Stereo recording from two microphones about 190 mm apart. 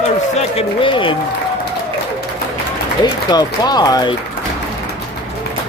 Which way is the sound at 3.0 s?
20° left (ahead or behind).